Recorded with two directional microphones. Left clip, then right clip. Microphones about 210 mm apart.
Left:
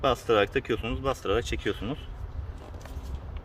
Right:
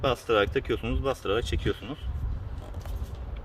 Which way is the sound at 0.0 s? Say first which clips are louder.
Left 1 dB; 25° left (ahead or behind).